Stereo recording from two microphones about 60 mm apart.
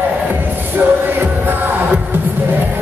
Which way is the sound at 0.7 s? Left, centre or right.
Right.